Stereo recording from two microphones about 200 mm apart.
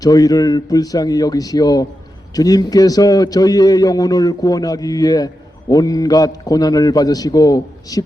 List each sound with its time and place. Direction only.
0.0 s a man's voice: 20° left (ahead or behind)